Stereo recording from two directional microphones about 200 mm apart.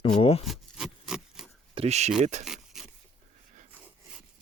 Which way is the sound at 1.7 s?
30° right (ahead or behind).